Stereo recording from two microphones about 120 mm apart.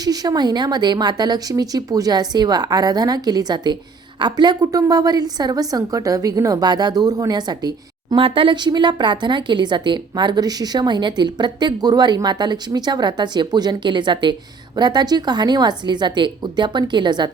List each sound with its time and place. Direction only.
0.0 s speech: 35° right (ahead or behind)
8.1 s speech: 45° right (ahead or behind)